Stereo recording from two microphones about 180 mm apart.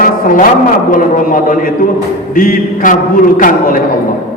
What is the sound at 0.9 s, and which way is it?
A man's voice, 50° left (ahead or behind).